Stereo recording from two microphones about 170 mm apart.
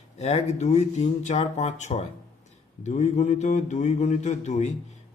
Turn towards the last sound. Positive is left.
turn(degrees=45)  # may be behind; listen again after turning